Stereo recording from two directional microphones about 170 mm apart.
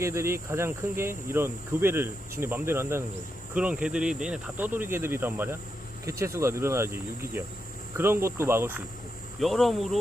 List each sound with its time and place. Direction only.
0.0 s speech: 15° right (ahead or behind)
9.4 s speech: centre (ahead or behind)